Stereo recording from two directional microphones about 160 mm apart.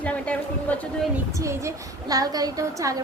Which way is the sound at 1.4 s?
20° right (ahead or behind).